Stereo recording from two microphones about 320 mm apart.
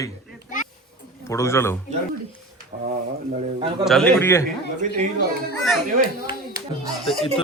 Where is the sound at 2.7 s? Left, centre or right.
Right.